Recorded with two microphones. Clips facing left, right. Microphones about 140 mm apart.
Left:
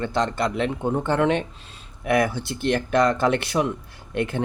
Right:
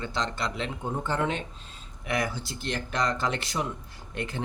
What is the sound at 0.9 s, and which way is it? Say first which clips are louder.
Speech: left 7 dB; 70° left (ahead or behind).